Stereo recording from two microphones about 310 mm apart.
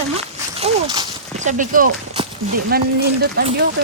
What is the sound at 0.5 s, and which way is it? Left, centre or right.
Speech, centre.